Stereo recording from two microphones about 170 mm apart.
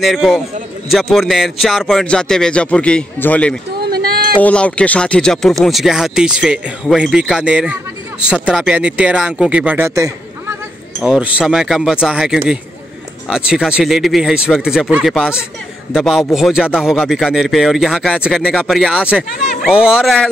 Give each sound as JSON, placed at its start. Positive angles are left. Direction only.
{"t": 0.0, "sound": "speech", "side_deg": 0}
{"t": 3.9, "sound": "a sound", "side_deg": -65}
{"t": 4.4, "sound": "speech", "side_deg": 10}
{"t": 11.0, "sound": "speech", "side_deg": -5}